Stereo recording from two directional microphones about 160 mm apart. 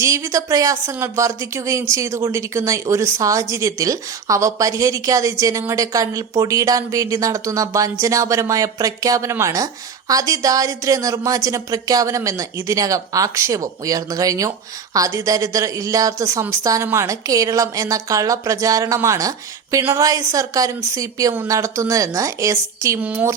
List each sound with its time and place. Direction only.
0.0 s speech: 20° right (ahead or behind)